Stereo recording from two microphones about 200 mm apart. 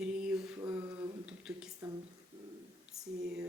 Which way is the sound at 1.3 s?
5° right (ahead or behind).